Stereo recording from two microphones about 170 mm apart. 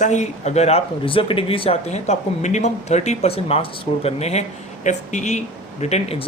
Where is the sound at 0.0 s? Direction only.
45° left (ahead or behind).